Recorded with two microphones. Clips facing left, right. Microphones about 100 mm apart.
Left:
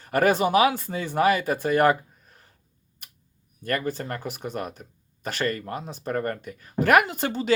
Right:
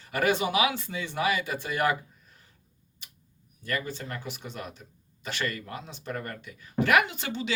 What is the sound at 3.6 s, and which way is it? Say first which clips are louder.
Speech: left 5 dB; 50° left (ahead or behind).